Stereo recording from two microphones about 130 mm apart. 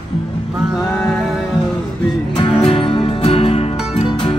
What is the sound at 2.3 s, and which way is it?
Music, 45° left (ahead or behind).